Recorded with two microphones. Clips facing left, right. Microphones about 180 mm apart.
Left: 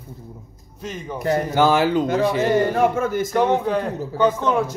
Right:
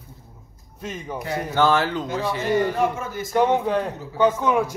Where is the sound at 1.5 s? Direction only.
10° left (ahead or behind).